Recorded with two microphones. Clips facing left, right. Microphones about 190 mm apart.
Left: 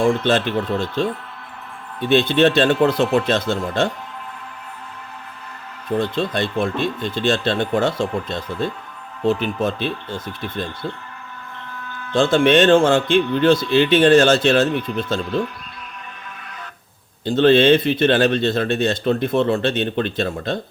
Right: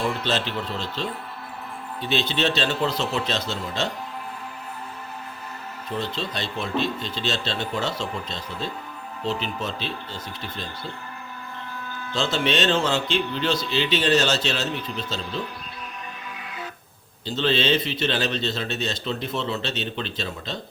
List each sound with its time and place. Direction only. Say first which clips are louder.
0.0 s speech: left 8 dB; 50° left (ahead or behind)
5.9 s speech: left 9 dB; 55° left (ahead or behind)
12.1 s speech: left 10 dB; 50° left (ahead or behind)
17.2 s speech: left 10 dB; 55° left (ahead or behind)